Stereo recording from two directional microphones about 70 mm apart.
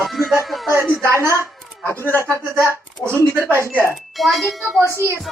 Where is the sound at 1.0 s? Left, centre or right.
Right.